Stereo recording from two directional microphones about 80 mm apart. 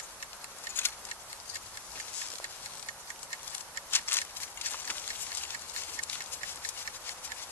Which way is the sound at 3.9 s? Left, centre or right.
Left.